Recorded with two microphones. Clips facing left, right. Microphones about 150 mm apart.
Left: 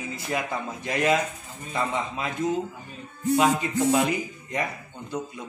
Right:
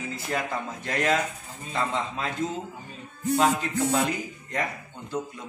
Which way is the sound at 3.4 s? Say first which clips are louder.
Left 1 dB; 15° left (ahead or behind).